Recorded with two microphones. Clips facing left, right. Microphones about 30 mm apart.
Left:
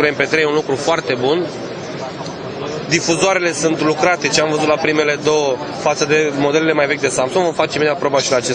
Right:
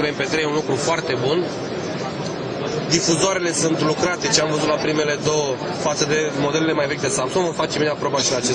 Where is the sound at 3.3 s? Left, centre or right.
Left.